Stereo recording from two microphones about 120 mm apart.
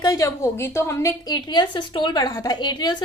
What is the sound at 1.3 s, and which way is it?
A woman's voice, 35° left (ahead or behind).